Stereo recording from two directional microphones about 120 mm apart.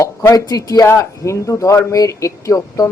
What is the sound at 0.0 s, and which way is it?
A man's voice, 30° left (ahead or behind).